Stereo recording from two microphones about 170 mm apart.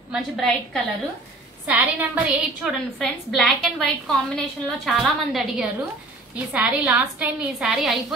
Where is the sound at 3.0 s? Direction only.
Centre (ahead or behind).